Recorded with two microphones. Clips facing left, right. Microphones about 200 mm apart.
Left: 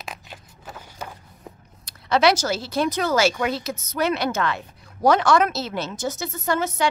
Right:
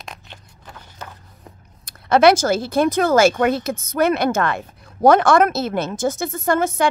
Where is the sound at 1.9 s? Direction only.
55° right (ahead or behind).